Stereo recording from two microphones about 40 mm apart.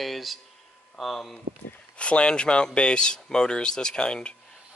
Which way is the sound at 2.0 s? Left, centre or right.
Left.